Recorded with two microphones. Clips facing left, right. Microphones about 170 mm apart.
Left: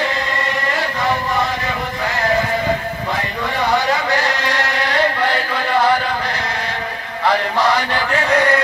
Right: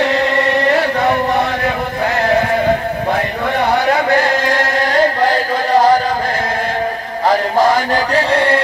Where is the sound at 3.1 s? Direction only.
55° right (ahead or behind).